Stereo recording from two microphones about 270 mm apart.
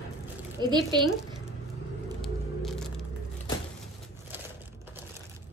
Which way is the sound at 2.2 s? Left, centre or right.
Centre.